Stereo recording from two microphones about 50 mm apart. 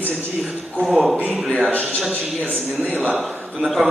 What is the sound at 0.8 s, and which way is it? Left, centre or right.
Speech, centre.